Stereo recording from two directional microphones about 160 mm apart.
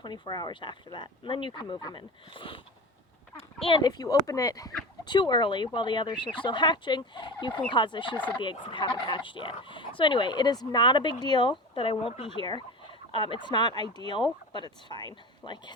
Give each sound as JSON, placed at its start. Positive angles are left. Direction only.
{"t": 0.0, "sound": "fowl", "side_deg": 25}